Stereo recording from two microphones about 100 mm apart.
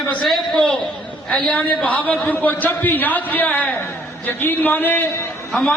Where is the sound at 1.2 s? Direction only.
10° left (ahead or behind).